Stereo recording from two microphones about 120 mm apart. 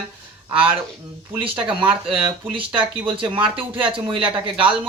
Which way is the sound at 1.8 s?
15° right (ahead or behind).